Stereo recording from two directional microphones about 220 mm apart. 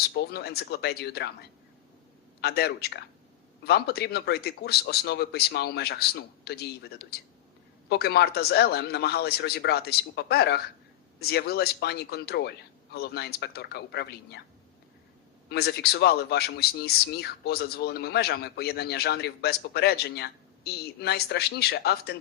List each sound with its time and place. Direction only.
0.1 s speech: 50° left (ahead or behind)
15.4 s speech: 45° left (ahead or behind)